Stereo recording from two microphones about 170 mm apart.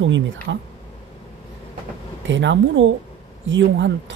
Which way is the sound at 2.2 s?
90° right.